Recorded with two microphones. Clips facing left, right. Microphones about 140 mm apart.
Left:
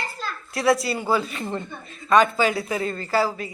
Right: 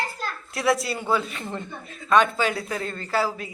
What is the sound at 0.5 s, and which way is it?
Speech, centre (ahead or behind).